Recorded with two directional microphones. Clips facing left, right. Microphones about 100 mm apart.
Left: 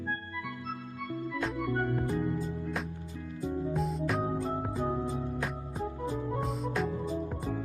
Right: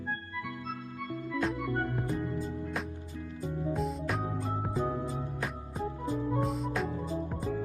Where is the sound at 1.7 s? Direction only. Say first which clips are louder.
Left 2 dB; 15° left (ahead or behind).